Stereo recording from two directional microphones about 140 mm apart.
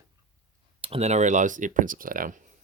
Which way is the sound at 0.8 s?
45° right (ahead or behind).